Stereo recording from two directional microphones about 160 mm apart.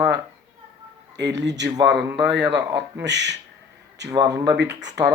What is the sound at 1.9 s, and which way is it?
Speech, 5° right (ahead or behind).